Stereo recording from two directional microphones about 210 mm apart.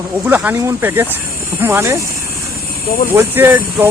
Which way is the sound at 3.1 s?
10° right (ahead or behind).